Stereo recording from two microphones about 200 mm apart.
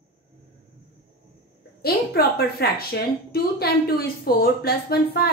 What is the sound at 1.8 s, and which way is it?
A woman's voice, 50° left (ahead or behind).